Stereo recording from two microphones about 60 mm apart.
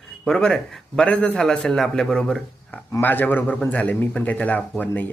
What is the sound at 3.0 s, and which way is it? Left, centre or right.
Speech, left.